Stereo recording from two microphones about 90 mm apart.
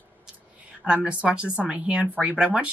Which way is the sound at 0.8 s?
15° right (ahead or behind).